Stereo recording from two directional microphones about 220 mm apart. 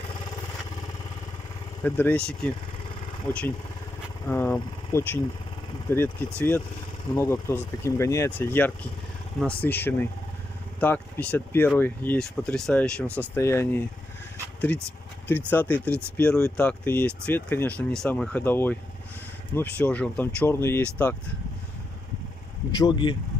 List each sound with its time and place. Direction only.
1.8 s speech: 10° left (ahead or behind)
22.7 s speech: 20° left (ahead or behind)